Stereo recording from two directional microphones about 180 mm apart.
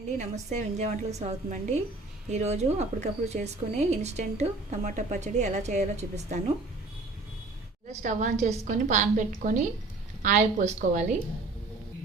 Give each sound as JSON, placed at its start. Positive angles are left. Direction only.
{"t": 0.2, "sound": "speech", "side_deg": -40}
{"t": 7.9, "sound": "a woman's voice", "side_deg": -45}